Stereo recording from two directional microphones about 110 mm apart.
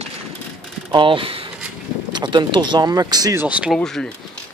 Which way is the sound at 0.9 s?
50° right (ahead or behind).